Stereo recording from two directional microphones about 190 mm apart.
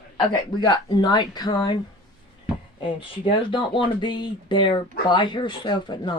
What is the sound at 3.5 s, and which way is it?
Speech, 25° left (ahead or behind).